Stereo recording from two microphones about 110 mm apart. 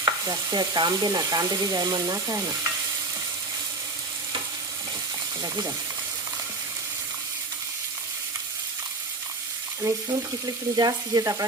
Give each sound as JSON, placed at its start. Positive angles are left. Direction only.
{"t": 0.0, "sound": "stir", "side_deg": -35}
{"t": 5.4, "sound": "stir", "side_deg": -35}
{"t": 9.8, "sound": "frying", "side_deg": -25}
{"t": 10.4, "sound": "stir", "side_deg": -35}